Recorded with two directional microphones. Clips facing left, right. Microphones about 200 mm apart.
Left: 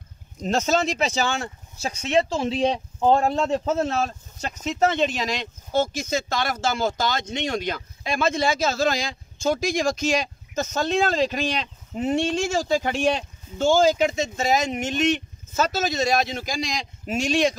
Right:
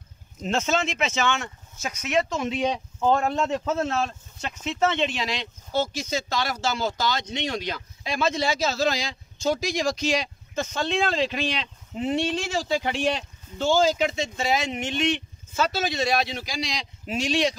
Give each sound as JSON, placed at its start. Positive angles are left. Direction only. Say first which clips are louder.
{"t": 0.4, "sound": "speech", "louder": "left 3 dB", "side_deg": 40}